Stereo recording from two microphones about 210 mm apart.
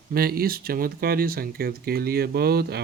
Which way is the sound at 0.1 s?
45° right (ahead or behind).